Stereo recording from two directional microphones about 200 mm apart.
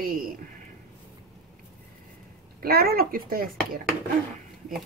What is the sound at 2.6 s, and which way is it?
Speech, 50° right (ahead or behind).